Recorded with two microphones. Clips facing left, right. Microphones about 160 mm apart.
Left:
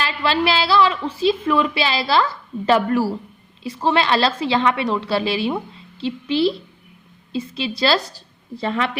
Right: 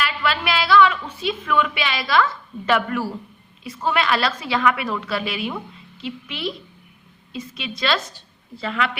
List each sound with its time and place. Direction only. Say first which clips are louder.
0.0 s a woman's voice: left 4 dB; 30° left (ahead or behind)